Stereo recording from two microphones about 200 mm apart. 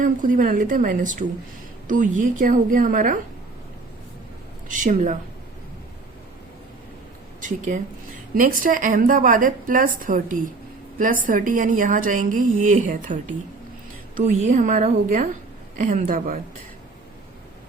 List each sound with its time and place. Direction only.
0.0 s a woman's voice: 40° right (ahead or behind)
4.7 s a woman's voice: 40° right (ahead or behind)
7.4 s a woman's voice: 40° right (ahead or behind)
14.2 s a woman's voice: 40° right (ahead or behind)